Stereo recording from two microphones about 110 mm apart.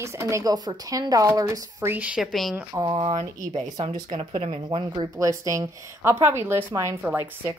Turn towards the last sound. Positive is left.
turn(degrees=-15)  # may be behind; listen again after turning